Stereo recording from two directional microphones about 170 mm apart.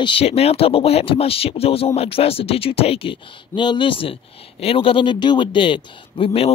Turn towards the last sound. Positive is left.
turn(degrees=35)  # may be behind; listen again after turning